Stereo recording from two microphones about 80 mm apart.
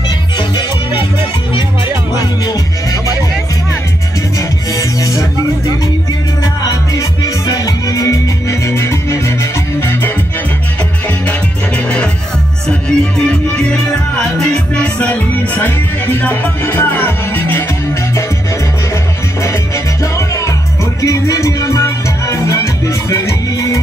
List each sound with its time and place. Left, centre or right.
4.4 s music: left
6.6 s music: left
11.2 s music: centre
20.2 s music: left